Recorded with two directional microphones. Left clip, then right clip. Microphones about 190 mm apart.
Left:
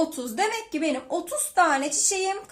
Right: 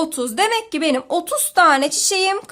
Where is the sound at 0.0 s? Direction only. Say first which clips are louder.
Right 6 dB; 45° right (ahead or behind).